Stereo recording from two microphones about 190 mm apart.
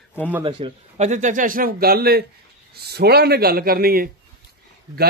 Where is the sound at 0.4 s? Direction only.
25° right (ahead or behind).